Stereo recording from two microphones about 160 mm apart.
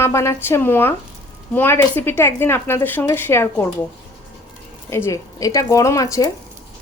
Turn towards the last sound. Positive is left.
turn(degrees=20)  # may be behind; listen again after turning